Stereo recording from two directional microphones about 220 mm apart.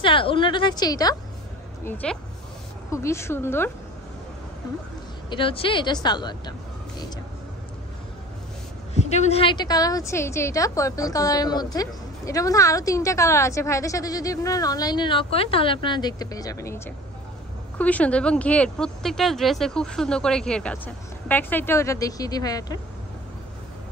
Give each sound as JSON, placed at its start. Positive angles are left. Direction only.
{"t": 0.0, "sound": "a woman's voice", "side_deg": 25}
{"t": 2.0, "sound": "a woman's voice", "side_deg": 5}
{"t": 5.3, "sound": "speech", "side_deg": 25}
{"t": 8.9, "sound": "a woman's voice", "side_deg": 30}